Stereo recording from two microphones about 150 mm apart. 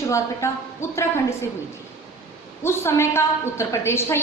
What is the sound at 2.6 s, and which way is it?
A woman's voice, 15° left (ahead or behind).